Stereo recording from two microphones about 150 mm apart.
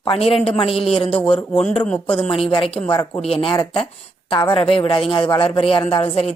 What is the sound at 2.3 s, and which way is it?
A woman's voice, 35° left (ahead or behind).